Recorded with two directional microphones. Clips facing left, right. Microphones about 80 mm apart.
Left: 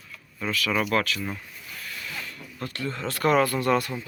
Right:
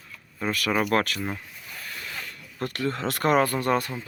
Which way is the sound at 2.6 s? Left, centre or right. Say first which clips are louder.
Right 4 dB; right.